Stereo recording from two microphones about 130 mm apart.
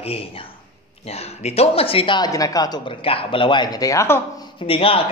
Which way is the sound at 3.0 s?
45° left (ahead or behind).